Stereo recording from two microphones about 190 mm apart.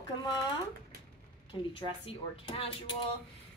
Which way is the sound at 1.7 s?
30° left (ahead or behind).